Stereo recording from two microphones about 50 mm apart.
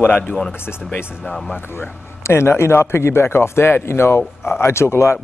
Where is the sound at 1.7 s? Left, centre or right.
Left.